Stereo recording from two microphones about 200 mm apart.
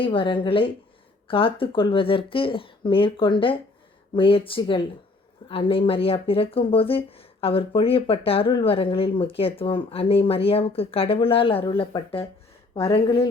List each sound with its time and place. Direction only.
0.0 s speech: 25° left (ahead or behind)